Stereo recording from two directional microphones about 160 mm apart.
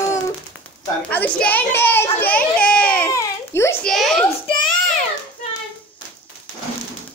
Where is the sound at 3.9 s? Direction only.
Centre (ahead or behind).